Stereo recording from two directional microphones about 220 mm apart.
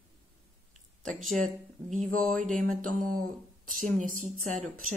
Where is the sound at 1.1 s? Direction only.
5° left (ahead or behind).